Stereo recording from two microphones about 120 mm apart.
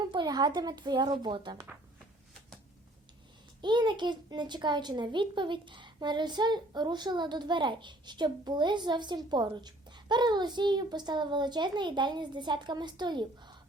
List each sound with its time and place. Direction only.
0.1 s a child's voice: 40° right (ahead or behind)
3.6 s a child's voice: 40° right (ahead or behind)